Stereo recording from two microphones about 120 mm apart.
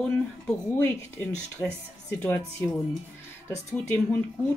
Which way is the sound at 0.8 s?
20° left (ahead or behind).